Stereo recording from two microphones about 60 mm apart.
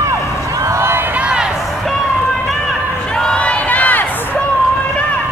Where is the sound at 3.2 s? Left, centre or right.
Centre.